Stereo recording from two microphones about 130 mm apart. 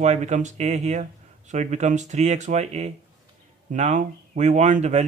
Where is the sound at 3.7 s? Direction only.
70° right (ahead or behind).